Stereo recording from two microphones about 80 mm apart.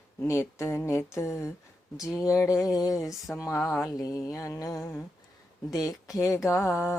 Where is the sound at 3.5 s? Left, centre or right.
Left.